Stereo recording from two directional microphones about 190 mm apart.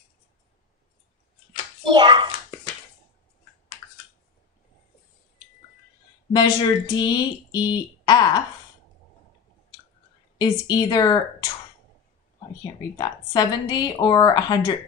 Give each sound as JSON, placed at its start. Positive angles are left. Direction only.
{"t": 1.9, "sound": "hands", "side_deg": -25}
{"t": 6.3, "sound": "speech", "side_deg": 20}
{"t": 10.4, "sound": "speech", "side_deg": 20}
{"t": 12.9, "sound": "speech", "side_deg": 20}